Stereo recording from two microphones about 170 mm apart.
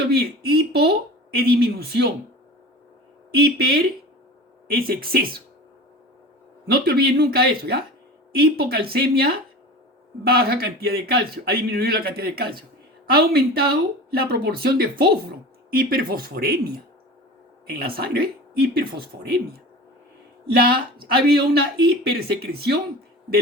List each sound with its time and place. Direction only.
0.0 s a man's voice: 65° right (ahead or behind)
3.3 s a man's voice: 70° right (ahead or behind)
6.7 s a man's voice: 65° right (ahead or behind)
20.5 s a man's voice: 60° right (ahead or behind)